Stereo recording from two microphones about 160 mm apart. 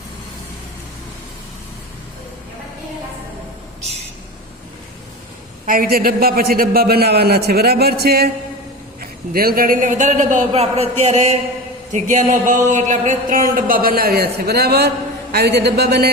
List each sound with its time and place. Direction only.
5.6 s a man's voice: 65° right (ahead or behind); by 8.3 s 80° right
9.0 s a man's voice: 70° right (ahead or behind); by 11.3 s 45° right (ahead or behind)
11.9 s a sound: 50° right (ahead or behind); by 16.0 s 85° right